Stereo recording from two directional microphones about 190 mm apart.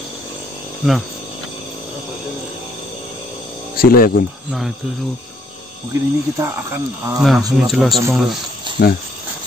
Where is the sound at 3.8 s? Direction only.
50° left (ahead or behind).